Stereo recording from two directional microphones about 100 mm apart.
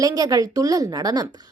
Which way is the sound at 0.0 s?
40° right (ahead or behind).